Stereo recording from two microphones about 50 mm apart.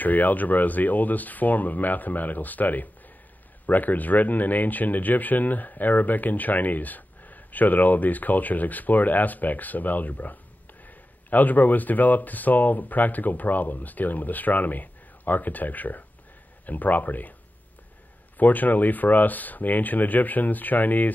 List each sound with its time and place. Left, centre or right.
0.0 s speech: left
18.4 s speech: left